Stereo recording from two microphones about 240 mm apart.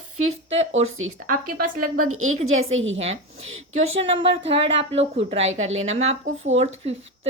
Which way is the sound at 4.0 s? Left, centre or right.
Right.